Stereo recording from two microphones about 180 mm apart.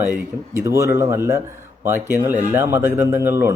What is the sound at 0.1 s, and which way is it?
Speech, 15° right (ahead or behind).